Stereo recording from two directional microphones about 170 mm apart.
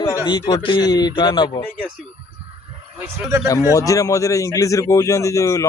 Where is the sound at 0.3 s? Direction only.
25° left (ahead or behind).